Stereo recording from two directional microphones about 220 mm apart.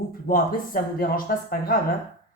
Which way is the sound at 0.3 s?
40° left (ahead or behind).